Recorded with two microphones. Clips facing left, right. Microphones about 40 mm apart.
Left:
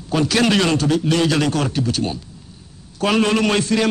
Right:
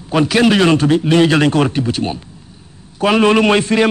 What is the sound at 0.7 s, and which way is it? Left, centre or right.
A man's voice, right.